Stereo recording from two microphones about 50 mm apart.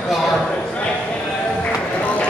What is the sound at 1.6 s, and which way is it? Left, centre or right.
Music, left.